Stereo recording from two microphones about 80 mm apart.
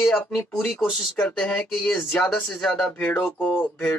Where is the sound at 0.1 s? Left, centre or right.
Centre.